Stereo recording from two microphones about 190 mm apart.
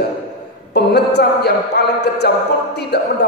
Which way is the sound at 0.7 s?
60° left (ahead or behind).